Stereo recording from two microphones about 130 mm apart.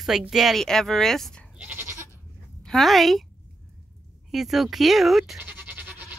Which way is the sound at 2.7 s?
Centre (ahead or behind).